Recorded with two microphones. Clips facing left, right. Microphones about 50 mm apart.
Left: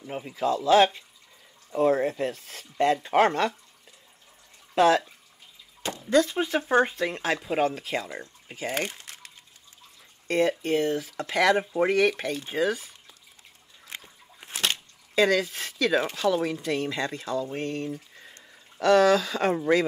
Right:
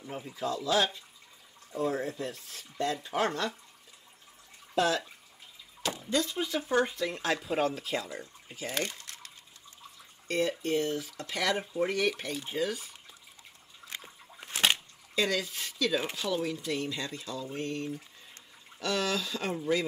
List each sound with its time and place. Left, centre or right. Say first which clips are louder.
0.1 s speech: left 7 dB; left
4.7 s speech: left 8 dB; left
6.0 s speech: left 9 dB; left
7.6 s speech: left 4 dB; centre
8.2 s speech: left 5 dB; left
10.6 s speech: left 5 dB; left
14.4 s a sound: left 1 dB; centre
15.1 s speech: left 8 dB; left
18.8 s speech: left 12 dB; left